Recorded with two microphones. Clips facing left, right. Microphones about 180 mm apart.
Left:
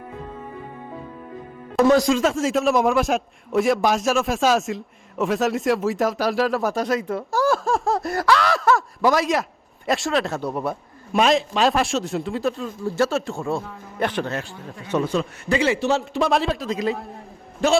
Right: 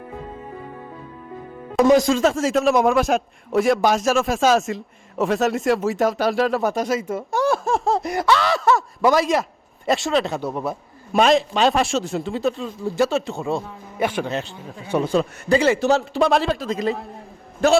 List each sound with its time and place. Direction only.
1.8 s a man's voice: centre (ahead or behind)
8.0 s a man's voice: 20° right (ahead or behind)
8.3 s a man's voice: centre (ahead or behind)
15.0 s a man's voice: 35° right (ahead or behind)
16.0 s a man's voice: centre (ahead or behind)